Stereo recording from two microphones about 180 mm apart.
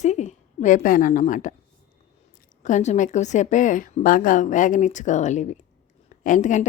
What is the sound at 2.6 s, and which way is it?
A woman's voice, 40° left (ahead or behind).